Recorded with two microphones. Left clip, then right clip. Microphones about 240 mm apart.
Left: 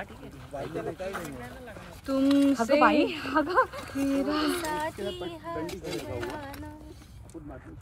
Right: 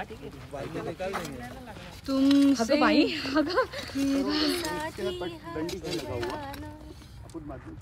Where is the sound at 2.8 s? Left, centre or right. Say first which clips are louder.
Left 1 dB; centre.